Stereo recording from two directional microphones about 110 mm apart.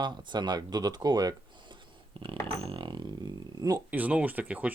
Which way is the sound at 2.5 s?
60° right (ahead or behind).